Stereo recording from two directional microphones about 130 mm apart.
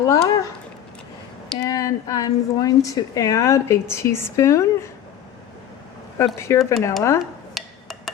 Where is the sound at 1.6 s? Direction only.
25° left (ahead or behind).